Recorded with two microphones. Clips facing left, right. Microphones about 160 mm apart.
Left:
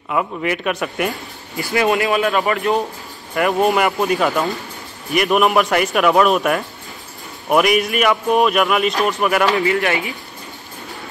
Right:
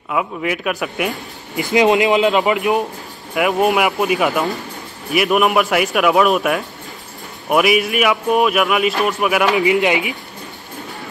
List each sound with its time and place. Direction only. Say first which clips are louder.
0.1 s a man's voice: even; centre (ahead or behind)
1.6 s speech: right 4 dB; 20° right (ahead or behind)
3.3 s a man's voice: even; 5° right (ahead or behind)
9.5 s speech: right 2 dB; 15° right (ahead or behind)